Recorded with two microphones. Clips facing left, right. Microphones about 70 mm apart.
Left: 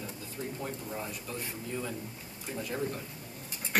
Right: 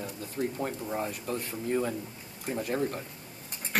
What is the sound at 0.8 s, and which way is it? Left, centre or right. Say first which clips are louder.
Speech: right 6 dB; right.